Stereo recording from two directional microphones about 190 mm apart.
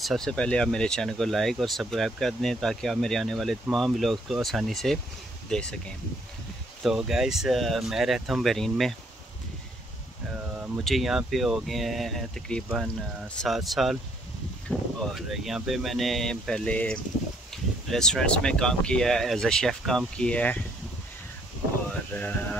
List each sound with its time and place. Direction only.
0.0 s speech: centre (ahead or behind)
6.8 s speech: centre (ahead or behind)
10.5 s speech: centre (ahead or behind)
22.1 s speech: 10° left (ahead or behind)